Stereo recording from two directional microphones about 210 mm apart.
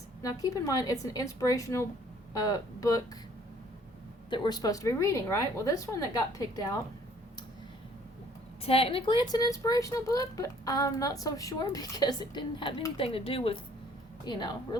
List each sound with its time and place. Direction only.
0.2 s speech: 15° left (ahead or behind)
4.3 s speech: 20° left (ahead or behind)
8.6 s speech: 25° left (ahead or behind)